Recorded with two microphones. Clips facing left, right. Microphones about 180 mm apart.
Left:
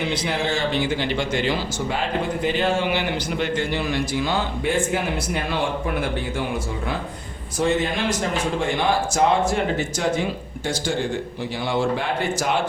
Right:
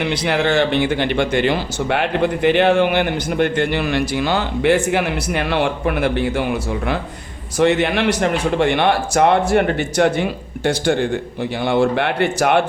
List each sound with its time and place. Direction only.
0.0 s speech: 70° right (ahead or behind)